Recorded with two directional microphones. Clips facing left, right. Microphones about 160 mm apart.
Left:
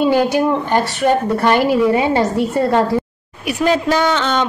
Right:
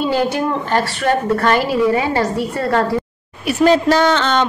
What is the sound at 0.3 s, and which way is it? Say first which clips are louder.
A woman's voice: left 3 dB; 15° left (ahead or behind).